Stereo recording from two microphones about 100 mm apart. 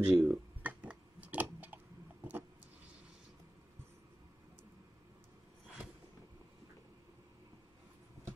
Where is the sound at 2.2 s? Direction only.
20° right (ahead or behind).